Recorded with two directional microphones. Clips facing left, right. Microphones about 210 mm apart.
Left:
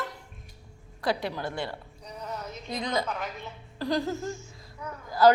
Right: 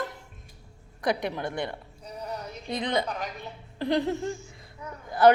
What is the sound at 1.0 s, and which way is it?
Speech, 20° right (ahead or behind).